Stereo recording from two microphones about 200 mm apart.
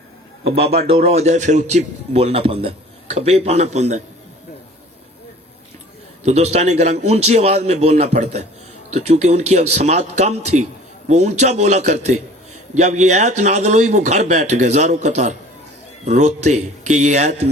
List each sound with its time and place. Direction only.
0.4 s a man's voice: 30° right (ahead or behind)
6.2 s a man's voice: 30° right (ahead or behind)